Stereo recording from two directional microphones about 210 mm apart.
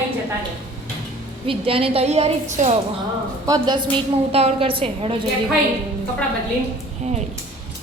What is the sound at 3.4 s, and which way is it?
A woman's voice, 20° right (ahead or behind).